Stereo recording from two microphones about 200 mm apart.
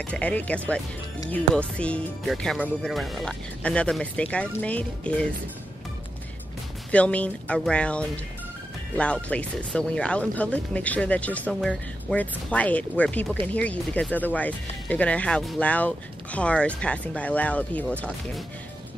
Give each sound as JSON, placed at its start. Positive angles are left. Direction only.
{"t": 0.0, "sound": "speech", "side_deg": 5}
{"t": 6.9, "sound": "speech", "side_deg": 5}